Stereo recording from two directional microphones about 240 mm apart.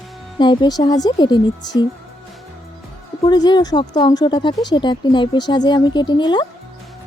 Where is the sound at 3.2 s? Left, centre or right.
Centre.